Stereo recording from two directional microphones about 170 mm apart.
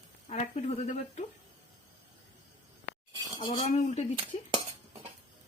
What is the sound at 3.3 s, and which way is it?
Speech, 30° left (ahead or behind).